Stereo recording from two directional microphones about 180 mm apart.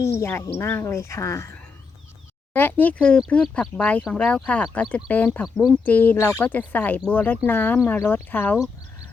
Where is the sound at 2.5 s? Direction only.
10° left (ahead or behind).